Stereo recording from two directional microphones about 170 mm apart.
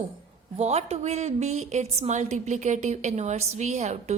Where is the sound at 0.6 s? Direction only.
40° right (ahead or behind).